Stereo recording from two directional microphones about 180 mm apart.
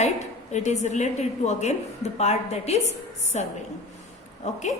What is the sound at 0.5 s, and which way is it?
A woman's voice, 40° left (ahead or behind).